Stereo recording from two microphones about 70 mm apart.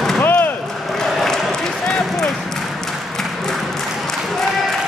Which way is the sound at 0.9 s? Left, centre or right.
Centre.